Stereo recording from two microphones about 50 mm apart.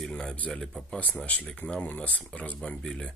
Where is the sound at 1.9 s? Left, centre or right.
Left.